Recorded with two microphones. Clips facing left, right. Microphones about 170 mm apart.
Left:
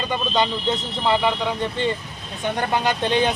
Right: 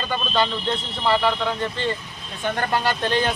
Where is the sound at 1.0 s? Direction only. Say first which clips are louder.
Even; 15° left (ahead or behind).